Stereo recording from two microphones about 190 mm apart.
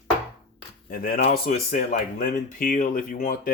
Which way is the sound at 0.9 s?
45° left (ahead or behind).